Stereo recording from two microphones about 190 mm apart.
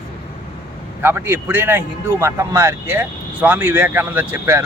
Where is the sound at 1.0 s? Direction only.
10° right (ahead or behind).